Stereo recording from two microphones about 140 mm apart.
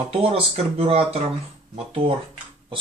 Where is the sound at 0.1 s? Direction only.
45° right (ahead or behind).